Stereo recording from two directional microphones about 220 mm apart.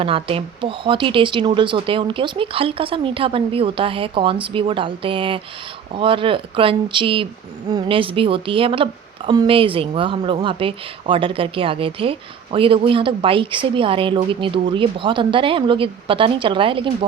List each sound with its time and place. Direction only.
0.0 s a woman's voice: 25° right (ahead or behind)